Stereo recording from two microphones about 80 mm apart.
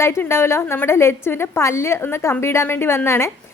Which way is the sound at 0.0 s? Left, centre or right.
Left.